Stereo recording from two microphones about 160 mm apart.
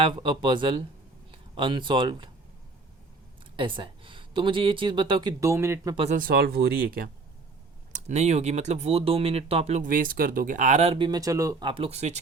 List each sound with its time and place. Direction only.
0.0 s speech: 30° right (ahead or behind)
3.5 s speech: 30° right (ahead or behind)
5.4 s speech: 15° right (ahead or behind)
6.1 s speech: 75° right (ahead or behind)
7.9 s speech: 45° right (ahead or behind)
9.8 s speech: 60° right (ahead or behind)
10.9 s speech: 30° right (ahead or behind)
11.7 s speech: 40° right (ahead or behind)